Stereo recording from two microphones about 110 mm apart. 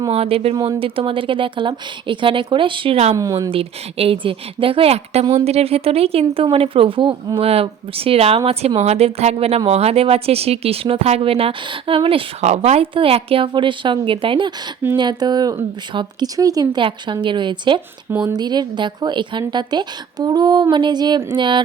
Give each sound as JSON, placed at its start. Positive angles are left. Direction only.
{"t": 0.1, "sound": "speech", "side_deg": -60}
{"t": 3.2, "sound": "a woman's voice", "side_deg": -30}
{"t": 3.5, "sound": "speech", "side_deg": -60}
{"t": 12.9, "sound": "a woman's voice", "side_deg": -60}
{"t": 16.4, "sound": "a woman's voice", "side_deg": -35}
{"t": 16.8, "sound": "a woman's voice", "side_deg": -50}